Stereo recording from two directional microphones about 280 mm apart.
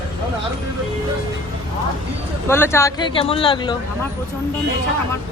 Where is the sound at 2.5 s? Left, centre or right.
Centre.